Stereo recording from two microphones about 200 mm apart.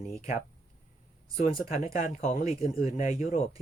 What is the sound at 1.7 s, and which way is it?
Speech, 40° left (ahead or behind).